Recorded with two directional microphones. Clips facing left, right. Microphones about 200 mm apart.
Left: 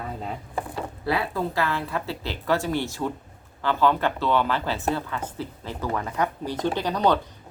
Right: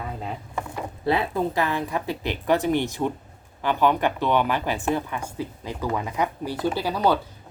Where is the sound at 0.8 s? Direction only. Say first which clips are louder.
Right 3 dB; 20° right (ahead or behind).